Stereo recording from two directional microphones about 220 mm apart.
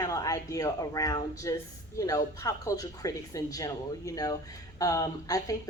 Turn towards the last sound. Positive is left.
turn(degrees=15)  # may be behind; listen again after turning